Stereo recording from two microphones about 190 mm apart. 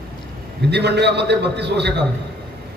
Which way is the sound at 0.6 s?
60° right (ahead or behind).